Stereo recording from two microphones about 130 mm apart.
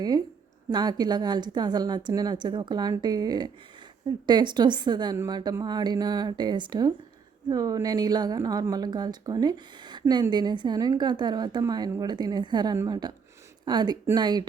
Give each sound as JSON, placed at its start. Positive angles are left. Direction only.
{"t": 0.7, "sound": "a woman's voice", "side_deg": -30}